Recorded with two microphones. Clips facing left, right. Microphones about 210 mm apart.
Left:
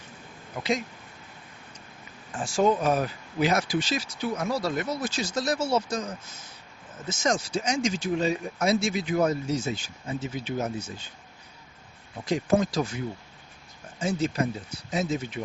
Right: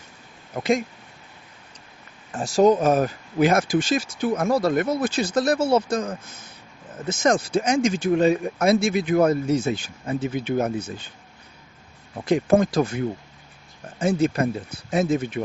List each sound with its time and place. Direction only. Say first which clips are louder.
0.5 s speech: right 6 dB; 50° right (ahead or behind)
2.3 s speech: right 6 dB; 40° right (ahead or behind); by 11.1 s 55° right (ahead or behind)
12.2 s speech: right 5 dB; 55° right (ahead or behind)
14.0 s speech: right 6 dB; 55° right (ahead or behind)